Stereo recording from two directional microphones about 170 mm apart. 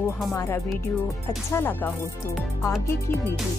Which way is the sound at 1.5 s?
15° left (ahead or behind).